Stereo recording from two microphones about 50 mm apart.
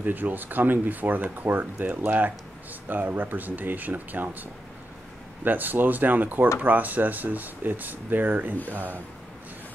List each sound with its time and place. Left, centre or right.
0.0 s speech: right